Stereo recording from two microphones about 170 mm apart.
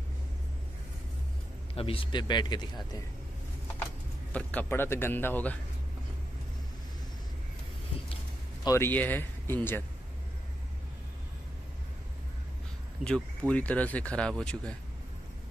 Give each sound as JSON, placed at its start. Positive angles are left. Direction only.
{"t": 1.8, "sound": "speech", "side_deg": 30}
{"t": 4.3, "sound": "speech", "side_deg": 10}
{"t": 8.6, "sound": "speech", "side_deg": 15}
{"t": 13.0, "sound": "speech", "side_deg": 5}